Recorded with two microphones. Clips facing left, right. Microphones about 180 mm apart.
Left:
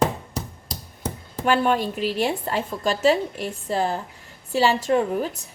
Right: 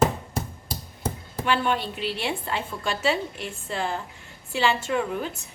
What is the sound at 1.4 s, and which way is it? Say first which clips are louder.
A woman's voice: left 5 dB; 45° left (ahead or behind).